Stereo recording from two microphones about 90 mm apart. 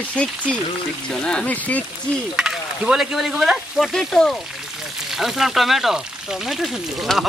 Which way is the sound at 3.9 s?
5° left (ahead or behind).